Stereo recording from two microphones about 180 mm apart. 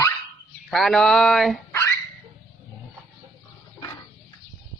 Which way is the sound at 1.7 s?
15° left (ahead or behind).